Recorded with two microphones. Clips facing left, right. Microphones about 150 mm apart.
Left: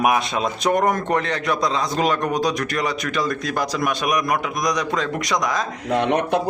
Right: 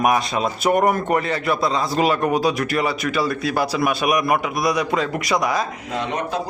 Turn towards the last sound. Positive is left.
turn(degrees=65)  # may be behind; listen again after turning